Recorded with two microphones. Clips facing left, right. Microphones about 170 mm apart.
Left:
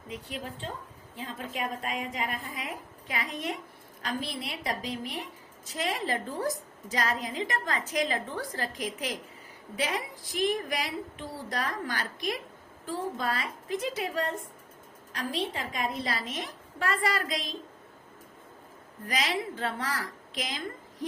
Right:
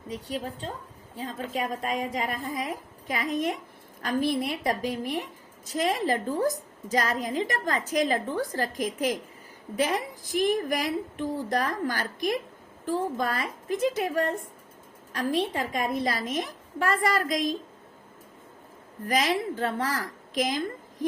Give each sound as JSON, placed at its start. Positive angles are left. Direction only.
{"t": 0.1, "sound": "a woman's voice", "side_deg": -40}
{"t": 19.0, "sound": "a woman's voice", "side_deg": -45}